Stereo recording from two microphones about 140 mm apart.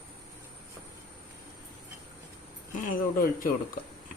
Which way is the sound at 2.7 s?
85° left.